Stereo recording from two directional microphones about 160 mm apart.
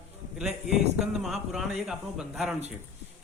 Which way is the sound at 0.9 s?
Centre (ahead or behind).